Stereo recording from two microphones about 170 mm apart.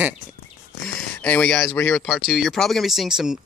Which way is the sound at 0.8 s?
5° left (ahead or behind).